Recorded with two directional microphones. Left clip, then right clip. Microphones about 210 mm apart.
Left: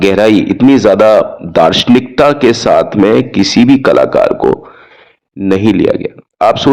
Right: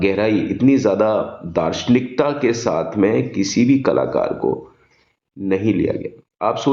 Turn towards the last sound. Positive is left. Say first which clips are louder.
# left 10 dB
turn(degrees=35)  # may be behind; listen again after turning